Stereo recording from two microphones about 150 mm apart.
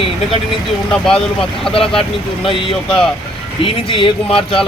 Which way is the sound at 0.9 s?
5° left (ahead or behind).